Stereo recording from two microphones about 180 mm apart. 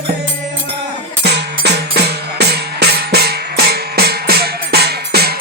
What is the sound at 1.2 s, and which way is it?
Music, 65° right (ahead or behind).